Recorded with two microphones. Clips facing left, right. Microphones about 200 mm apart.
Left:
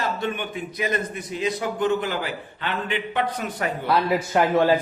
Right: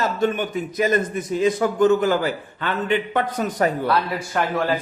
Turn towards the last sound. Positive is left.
turn(degrees=25)  # may be behind; listen again after turning